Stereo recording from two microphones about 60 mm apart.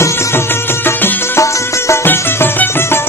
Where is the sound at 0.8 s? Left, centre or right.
Left.